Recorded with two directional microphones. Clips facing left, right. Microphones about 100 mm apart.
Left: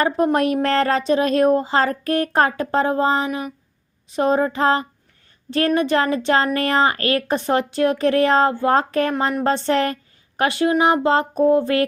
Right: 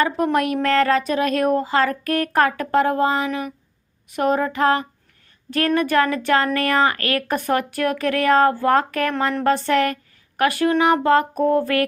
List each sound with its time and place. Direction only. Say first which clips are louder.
0.3 s a woman's voice: even; 35° left (ahead or behind)